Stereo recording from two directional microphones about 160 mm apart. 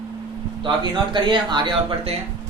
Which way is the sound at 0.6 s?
30° right (ahead or behind).